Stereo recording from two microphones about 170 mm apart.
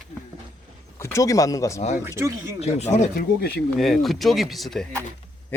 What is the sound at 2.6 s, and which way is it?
Speech, 40° left (ahead or behind).